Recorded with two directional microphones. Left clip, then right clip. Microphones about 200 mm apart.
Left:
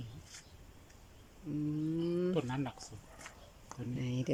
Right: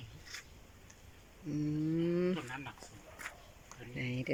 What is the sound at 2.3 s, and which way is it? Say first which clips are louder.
Speech: left 4 dB; 50° left (ahead or behind).